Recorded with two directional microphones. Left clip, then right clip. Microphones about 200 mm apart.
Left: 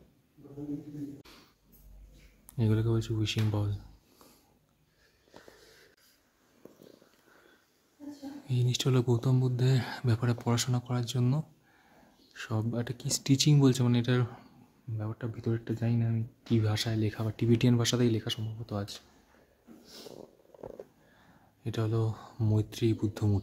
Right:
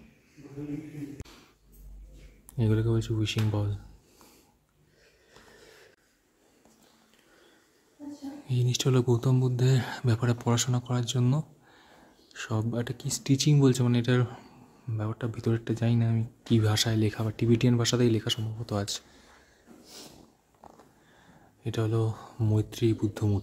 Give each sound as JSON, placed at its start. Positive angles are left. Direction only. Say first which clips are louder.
{"t": 1.2, "sound": "a sound", "louder": "right 2 dB", "side_deg": 0}
{"t": 2.5, "sound": "speech", "louder": "right 3 dB", "side_deg": 0}
{"t": 5.5, "sound": "wheeze", "louder": "right 3 dB", "side_deg": 0}
{"t": 8.5, "sound": "speech", "louder": "right 3 dB", "side_deg": 0}
{"t": 21.6, "sound": "speech", "louder": "right 3 dB", "side_deg": 0}